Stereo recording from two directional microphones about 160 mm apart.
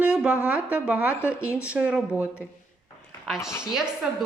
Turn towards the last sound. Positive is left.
turn(degrees=-5)  # may be behind; listen again after turning